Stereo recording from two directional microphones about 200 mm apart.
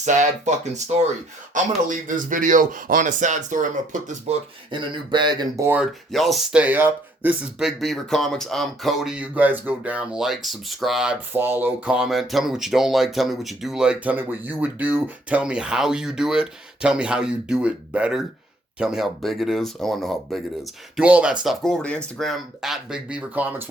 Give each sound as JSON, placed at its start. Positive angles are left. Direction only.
{"t": 0.0, "sound": "speech", "side_deg": -35}
{"t": 4.7, "sound": "speech", "side_deg": -25}